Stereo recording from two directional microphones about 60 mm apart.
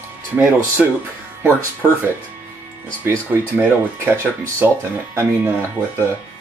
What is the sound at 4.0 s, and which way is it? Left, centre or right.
Speech, right.